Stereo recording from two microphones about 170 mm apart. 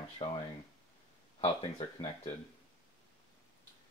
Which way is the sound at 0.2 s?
25° left (ahead or behind).